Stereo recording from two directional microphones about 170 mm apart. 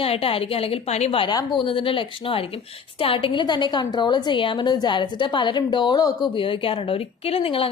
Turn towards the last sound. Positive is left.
turn(degrees=35)  # may be behind; listen again after turning